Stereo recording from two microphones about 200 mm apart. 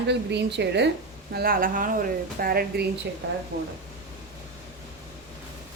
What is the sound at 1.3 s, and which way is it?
A woman's voice, 50° right (ahead or behind).